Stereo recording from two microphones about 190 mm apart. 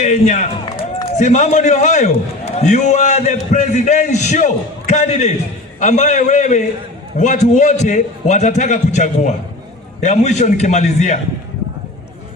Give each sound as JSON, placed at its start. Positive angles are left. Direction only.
{"t": 0.0, "sound": "a man's voice", "side_deg": 40}